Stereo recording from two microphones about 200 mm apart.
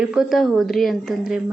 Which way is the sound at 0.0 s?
5° right (ahead or behind).